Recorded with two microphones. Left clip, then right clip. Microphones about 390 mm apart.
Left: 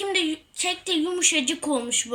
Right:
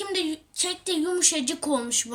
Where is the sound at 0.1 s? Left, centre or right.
Right.